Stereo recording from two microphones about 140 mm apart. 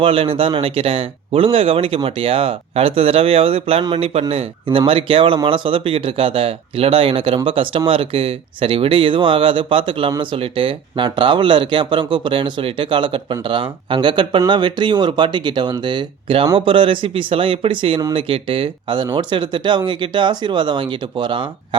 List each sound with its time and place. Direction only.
0.0 s speech: 40° right (ahead or behind)